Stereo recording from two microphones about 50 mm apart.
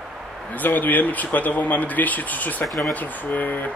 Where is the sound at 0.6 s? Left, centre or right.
Left.